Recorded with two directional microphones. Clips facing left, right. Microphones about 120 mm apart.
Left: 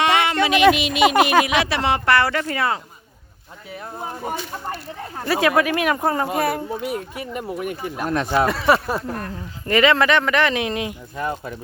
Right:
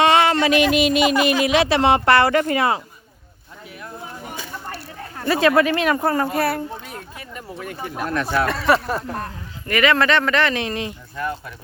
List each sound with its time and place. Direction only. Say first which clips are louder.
0.0 s a sound: right 3 dB; 35° right (ahead or behind)
0.8 s speech: right 5 dB; 45° right (ahead or behind)
1.1 s speech: left 2 dB; 60° left (ahead or behind)
1.5 s speech: right 4 dB; 30° right (ahead or behind)
5.2 s speech: right 2 dB; 10° left (ahead or behind)
8.4 s speech: left 1 dB; 10° left (ahead or behind)
9.0 s speech: even; 35° right (ahead or behind)
9.6 s speech: left 1 dB; 25° left (ahead or behind)